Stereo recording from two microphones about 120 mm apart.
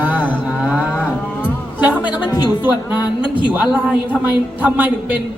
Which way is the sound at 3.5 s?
5° right (ahead or behind).